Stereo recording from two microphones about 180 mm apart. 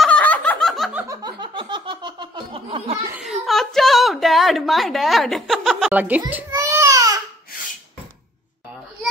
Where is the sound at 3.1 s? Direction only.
Centre (ahead or behind).